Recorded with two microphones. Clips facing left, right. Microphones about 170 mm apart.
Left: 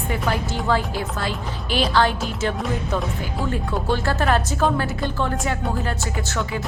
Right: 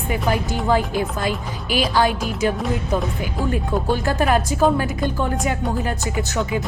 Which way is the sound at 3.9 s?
15° right (ahead or behind).